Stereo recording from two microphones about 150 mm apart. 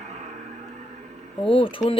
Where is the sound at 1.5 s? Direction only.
35° left (ahead or behind).